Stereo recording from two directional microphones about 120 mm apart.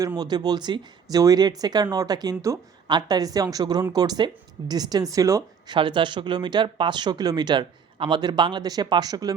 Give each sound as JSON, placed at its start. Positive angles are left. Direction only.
{"t": 0.2, "sound": "speech", "side_deg": -35}
{"t": 5.7, "sound": "speech", "side_deg": -45}